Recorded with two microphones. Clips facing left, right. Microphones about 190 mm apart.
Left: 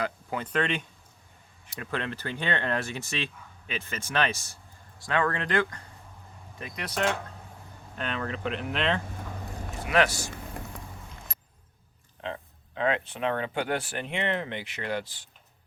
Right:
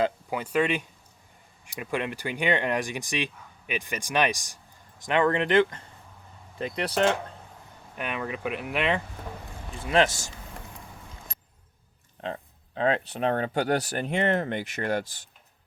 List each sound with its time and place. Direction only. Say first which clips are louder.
0.3 s speech: right 3 dB; 10° right (ahead or behind); by 7.2 s 30° right (ahead or behind)
7.9 s speech: right 1 dB; 10° right (ahead or behind)
9.9 s speech: right 2 dB; 25° right (ahead or behind)
12.2 s speech: right 2 dB; 35° right (ahead or behind)